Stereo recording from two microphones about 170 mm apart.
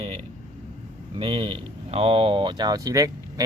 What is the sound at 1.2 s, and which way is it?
Speech, 30° right (ahead or behind).